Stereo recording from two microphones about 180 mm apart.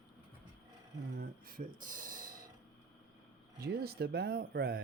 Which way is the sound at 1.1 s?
55° right (ahead or behind).